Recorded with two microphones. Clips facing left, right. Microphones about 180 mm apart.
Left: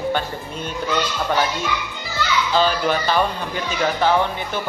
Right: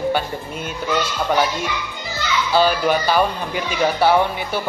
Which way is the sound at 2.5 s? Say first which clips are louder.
Right 4 dB; 10° right (ahead or behind).